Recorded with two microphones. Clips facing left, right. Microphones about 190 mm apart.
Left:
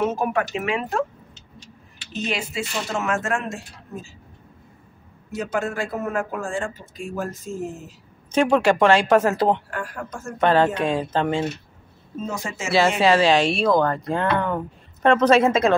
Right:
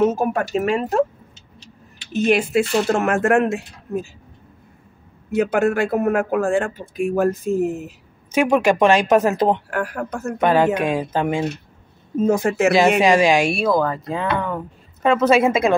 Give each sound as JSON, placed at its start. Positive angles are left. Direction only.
{"t": 0.0, "sound": "speech", "side_deg": -40}
{"t": 2.1, "sound": "speech", "side_deg": -55}
{"t": 5.3, "sound": "speech", "side_deg": -60}
{"t": 8.3, "sound": "speech", "side_deg": -10}
{"t": 9.7, "sound": "speech", "side_deg": -65}
{"t": 10.4, "sound": "speech", "side_deg": -10}
{"t": 12.2, "sound": "speech", "side_deg": -55}
{"t": 13.0, "sound": "speech", "side_deg": -15}